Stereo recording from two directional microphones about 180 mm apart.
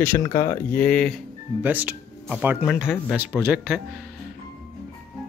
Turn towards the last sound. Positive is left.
turn(degrees=-5)  # may be behind; listen again after turning